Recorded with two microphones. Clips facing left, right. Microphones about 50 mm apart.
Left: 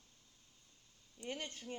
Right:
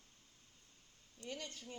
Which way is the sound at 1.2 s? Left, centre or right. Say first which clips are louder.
Left 3 dB; left.